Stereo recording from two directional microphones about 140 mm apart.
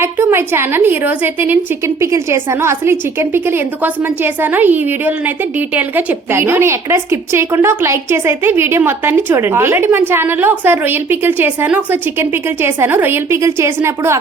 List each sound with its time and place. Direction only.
0.0 s a woman's voice: 15° right (ahead or behind)